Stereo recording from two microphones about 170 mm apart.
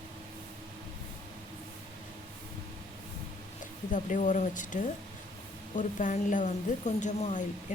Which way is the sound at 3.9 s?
50° left (ahead or behind).